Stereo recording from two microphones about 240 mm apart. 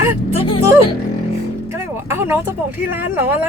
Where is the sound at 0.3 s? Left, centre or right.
Left.